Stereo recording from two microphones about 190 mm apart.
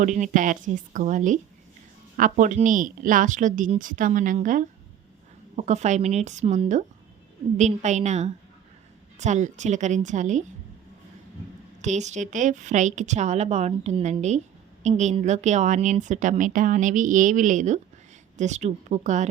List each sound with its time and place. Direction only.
0.0 s a woman's voice: 40° right (ahead or behind)
11.8 s a woman's voice: 40° right (ahead or behind)